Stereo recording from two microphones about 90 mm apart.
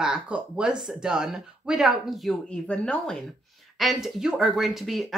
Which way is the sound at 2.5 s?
10° left (ahead or behind).